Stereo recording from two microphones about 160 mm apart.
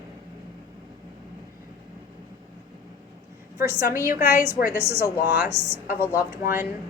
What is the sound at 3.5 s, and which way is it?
Speech, 20° right (ahead or behind).